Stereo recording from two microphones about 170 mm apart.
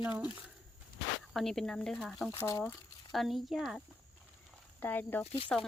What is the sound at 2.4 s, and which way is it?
Speech, 15° left (ahead or behind).